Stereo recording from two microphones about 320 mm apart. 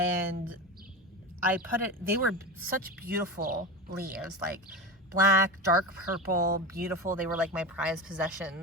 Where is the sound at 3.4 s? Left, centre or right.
Right.